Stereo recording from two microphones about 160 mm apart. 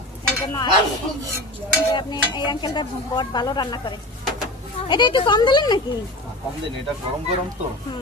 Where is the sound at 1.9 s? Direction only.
25° left (ahead or behind).